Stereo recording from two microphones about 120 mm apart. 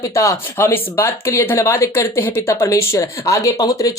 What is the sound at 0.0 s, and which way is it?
Speech, 25° left (ahead or behind).